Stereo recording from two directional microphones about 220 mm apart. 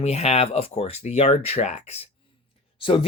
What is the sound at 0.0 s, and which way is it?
Speech, 30° left (ahead or behind).